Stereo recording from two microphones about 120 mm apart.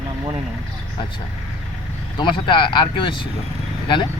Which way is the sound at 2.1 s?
40° left (ahead or behind).